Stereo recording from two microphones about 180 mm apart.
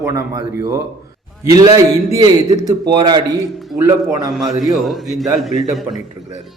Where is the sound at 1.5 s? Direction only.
20° right (ahead or behind).